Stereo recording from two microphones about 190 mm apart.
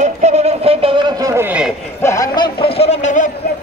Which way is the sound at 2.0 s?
15° left (ahead or behind).